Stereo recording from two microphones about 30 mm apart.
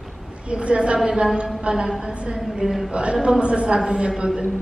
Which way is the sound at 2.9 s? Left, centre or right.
Right.